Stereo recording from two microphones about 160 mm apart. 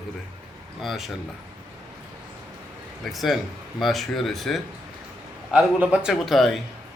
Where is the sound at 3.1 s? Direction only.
Centre (ahead or behind).